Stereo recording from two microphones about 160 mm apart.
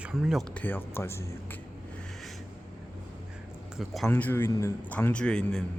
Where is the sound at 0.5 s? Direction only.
10° left (ahead or behind).